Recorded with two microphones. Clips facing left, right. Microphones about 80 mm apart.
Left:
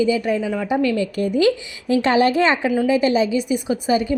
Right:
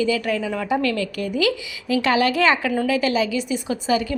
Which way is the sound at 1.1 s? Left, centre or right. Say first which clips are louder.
Left 4 dB; left.